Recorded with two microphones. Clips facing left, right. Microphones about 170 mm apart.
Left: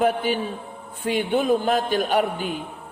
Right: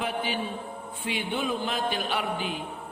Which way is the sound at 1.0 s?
45° left (ahead or behind).